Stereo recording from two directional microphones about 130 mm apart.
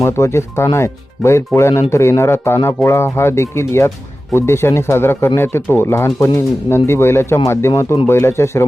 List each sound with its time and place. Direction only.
0.0 s speech: 20° left (ahead or behind)